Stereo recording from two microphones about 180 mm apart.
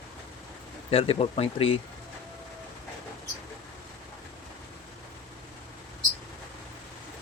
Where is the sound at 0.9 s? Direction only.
30° left (ahead or behind).